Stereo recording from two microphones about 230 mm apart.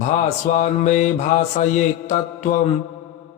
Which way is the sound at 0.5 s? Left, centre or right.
Left.